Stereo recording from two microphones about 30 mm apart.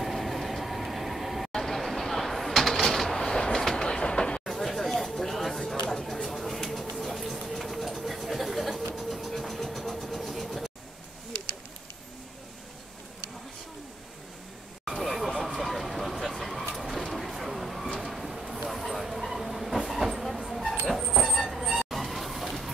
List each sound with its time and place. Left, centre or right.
0.0 s train: centre
1.5 s a sound: centre
3.5 s train: centre
4.5 s a sound: centre
6.3 s bird: centre
7.0 s a sound: centre
9.1 s vehicle: centre
14.9 s vehicle: centre
18.6 s train: centre